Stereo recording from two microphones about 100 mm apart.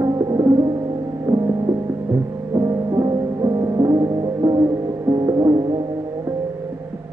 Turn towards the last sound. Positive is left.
turn(degrees=-40)  # may be behind; listen again after turning